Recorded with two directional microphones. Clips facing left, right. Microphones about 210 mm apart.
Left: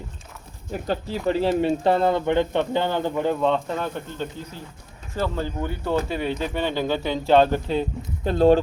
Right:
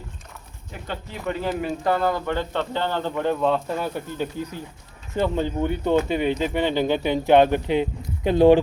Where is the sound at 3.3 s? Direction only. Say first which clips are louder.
Even; 5° right (ahead or behind).